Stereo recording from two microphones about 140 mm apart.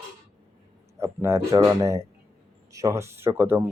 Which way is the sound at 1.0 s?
20° right (ahead or behind).